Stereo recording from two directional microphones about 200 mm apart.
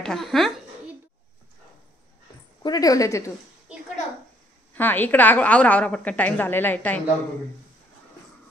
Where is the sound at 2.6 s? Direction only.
20° left (ahead or behind).